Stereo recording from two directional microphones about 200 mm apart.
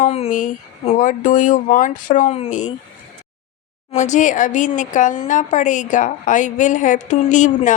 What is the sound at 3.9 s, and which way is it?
Speech, 40° left (ahead or behind).